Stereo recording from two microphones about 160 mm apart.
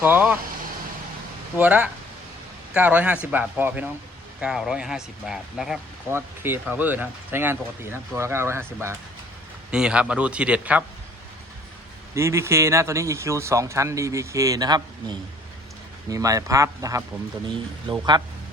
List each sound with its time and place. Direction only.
0.0 s speech: 10° right (ahead or behind)
1.5 s speech: 10° right (ahead or behind)
6.1 s speech: 15° right (ahead or behind)
9.7 s speech: 5° right (ahead or behind)
12.1 s speech: 15° right (ahead or behind)
16.0 s speech: 20° right (ahead or behind)